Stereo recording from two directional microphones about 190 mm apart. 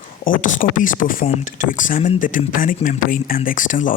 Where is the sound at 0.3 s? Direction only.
45° left (ahead or behind).